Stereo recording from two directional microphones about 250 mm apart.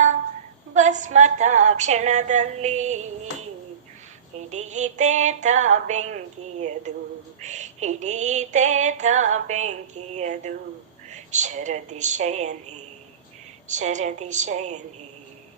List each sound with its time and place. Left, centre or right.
0.7 s female singing: right
4.4 s female singing: right